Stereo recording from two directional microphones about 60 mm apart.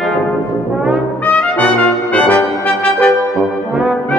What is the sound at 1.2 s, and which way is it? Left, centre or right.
Brass instrument, left.